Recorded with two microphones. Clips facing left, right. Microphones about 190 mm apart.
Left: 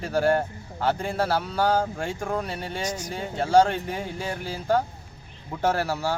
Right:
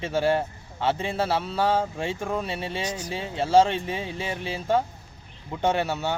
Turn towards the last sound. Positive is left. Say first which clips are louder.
# right 1 dB
turn(degrees=-20)  # may be behind; listen again after turning